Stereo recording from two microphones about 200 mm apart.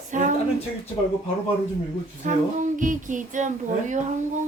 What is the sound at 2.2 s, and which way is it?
Speech, 40° right (ahead or behind).